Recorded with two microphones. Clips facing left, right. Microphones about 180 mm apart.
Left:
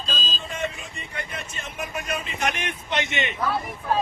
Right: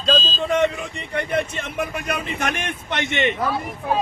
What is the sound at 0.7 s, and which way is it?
Speech, 65° right (ahead or behind).